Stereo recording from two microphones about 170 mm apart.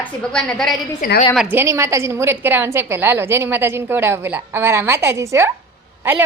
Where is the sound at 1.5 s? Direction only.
15° right (ahead or behind).